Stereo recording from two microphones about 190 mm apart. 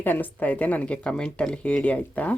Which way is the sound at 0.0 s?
10° left (ahead or behind).